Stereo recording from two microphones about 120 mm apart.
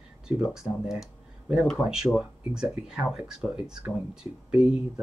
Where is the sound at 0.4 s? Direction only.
5° right (ahead or behind).